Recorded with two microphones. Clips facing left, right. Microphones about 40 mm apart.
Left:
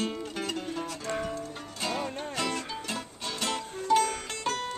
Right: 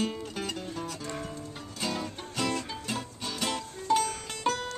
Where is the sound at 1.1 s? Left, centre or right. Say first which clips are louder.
Left 5 dB; left.